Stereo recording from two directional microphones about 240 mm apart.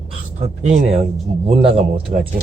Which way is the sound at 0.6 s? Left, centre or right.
Right.